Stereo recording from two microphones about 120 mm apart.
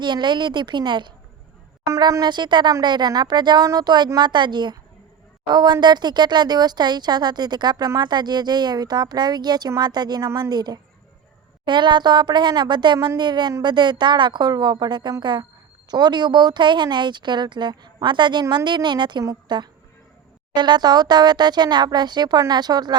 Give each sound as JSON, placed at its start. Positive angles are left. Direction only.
{"t": 0.0, "sound": "speech", "side_deg": -40}
{"t": 1.9, "sound": "speech", "side_deg": -30}